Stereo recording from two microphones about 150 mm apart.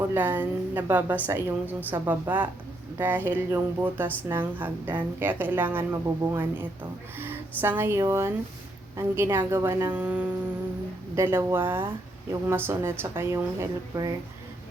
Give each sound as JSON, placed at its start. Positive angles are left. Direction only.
{"t": 0.1, "sound": "a woman's voice", "side_deg": -10}